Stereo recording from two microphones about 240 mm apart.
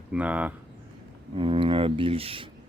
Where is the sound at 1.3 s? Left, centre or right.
Right.